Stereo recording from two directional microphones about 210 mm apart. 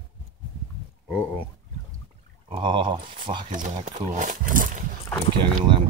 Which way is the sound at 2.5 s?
25° right (ahead or behind).